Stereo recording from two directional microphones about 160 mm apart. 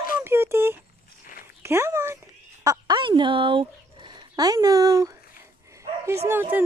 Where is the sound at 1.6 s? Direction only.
15° right (ahead or behind).